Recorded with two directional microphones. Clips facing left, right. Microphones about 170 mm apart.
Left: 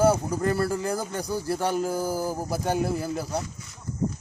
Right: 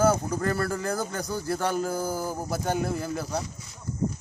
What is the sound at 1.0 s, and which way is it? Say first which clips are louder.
Speech: left 1 dB; 30° left (ahead or behind).